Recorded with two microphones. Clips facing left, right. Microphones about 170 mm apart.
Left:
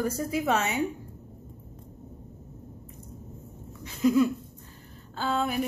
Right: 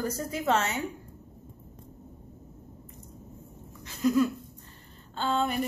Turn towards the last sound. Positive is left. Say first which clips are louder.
# even
turn(degrees=5)  # may be behind; listen again after turning